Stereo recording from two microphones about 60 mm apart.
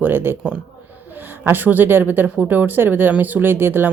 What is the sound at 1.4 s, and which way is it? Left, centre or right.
Speech, right.